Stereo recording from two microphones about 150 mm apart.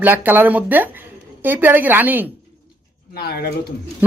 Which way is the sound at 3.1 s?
90° left.